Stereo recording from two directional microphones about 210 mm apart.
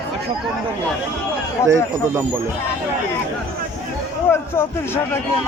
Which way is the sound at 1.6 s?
15° left (ahead or behind).